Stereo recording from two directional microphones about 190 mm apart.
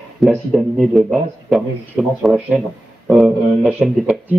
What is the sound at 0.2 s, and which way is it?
A man's voice, centre (ahead or behind).